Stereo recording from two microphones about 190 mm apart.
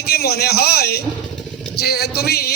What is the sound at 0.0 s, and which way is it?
A man's voice, 55° left (ahead or behind).